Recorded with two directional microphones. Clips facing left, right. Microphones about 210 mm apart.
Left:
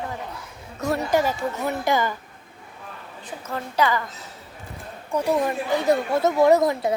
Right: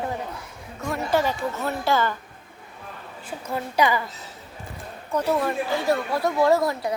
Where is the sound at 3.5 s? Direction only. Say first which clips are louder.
Right 1 dB; 15° right (ahead or behind).